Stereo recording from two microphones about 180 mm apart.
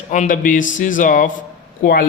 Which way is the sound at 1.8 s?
60° left (ahead or behind).